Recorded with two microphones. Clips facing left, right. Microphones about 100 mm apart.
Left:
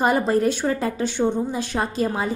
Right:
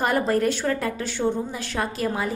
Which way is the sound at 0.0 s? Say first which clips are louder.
Left 2 dB; 20° left (ahead or behind).